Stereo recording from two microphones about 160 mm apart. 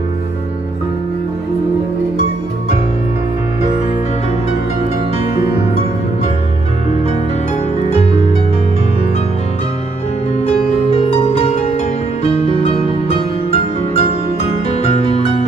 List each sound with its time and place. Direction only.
7.9 s music: 40° left (ahead or behind)
10.9 s music: 40° left (ahead or behind)